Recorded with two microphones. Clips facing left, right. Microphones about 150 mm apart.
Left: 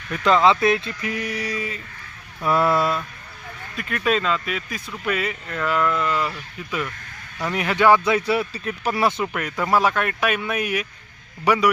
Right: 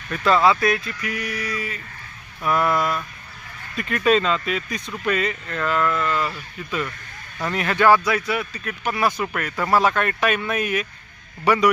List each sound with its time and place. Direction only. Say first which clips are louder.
0.1 s speech: left 1 dB; 20° left (ahead or behind)
3.8 s speech: right 4 dB; centre (ahead or behind)
7.5 s speech: even; 15° left (ahead or behind)
9.2 s speech: even; 15° left (ahead or behind)